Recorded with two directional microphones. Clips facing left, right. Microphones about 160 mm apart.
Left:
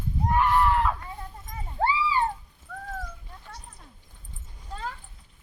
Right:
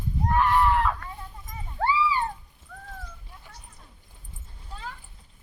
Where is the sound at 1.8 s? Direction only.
25° left (ahead or behind).